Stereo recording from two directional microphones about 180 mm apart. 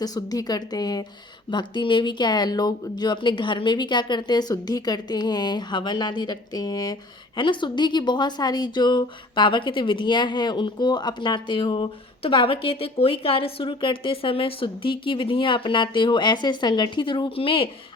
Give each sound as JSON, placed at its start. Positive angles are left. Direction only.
{"t": 0.0, "sound": "speech", "side_deg": 20}